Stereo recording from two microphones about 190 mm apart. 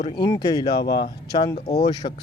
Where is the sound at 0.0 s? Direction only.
30° left (ahead or behind).